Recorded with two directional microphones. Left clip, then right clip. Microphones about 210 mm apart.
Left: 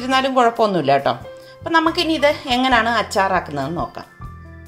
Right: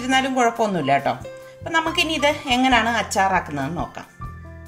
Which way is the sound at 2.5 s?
20° left (ahead or behind).